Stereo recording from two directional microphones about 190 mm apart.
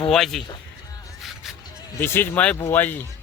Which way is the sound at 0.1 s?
Centre (ahead or behind).